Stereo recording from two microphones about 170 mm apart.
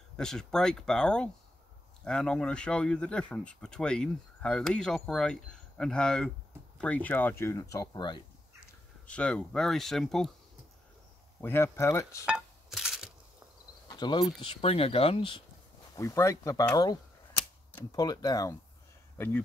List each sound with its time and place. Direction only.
0.2 s speech: 5° left (ahead or behind); by 8.2 s 25° left (ahead or behind)
9.0 s speech: 5° left (ahead or behind)
11.4 s speech: 15° left (ahead or behind)
12.3 s a sound: 5° right (ahead or behind)
13.8 s cricket: 25° left (ahead or behind)
14.4 s speech: 35° left (ahead or behind)
16.0 s speech: 20° left (ahead or behind)
19.1 s speech: 10° left (ahead or behind)